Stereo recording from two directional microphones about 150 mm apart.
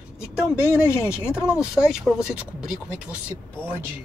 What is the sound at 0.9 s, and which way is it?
Speech, 15° left (ahead or behind).